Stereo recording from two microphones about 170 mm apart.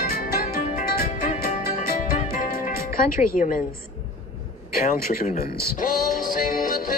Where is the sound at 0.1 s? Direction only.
55° left (ahead or behind).